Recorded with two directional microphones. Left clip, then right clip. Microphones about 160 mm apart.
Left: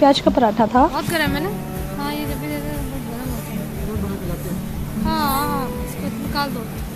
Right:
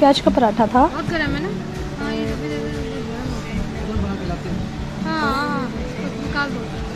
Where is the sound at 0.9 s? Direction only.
25° left (ahead or behind).